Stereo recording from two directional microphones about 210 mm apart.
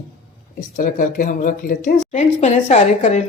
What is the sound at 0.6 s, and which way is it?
Speech, 40° left (ahead or behind).